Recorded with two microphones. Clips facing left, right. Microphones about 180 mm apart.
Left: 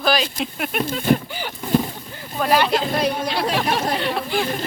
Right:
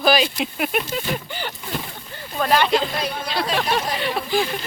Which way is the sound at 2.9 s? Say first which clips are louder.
Left 6 dB; 55° left (ahead or behind).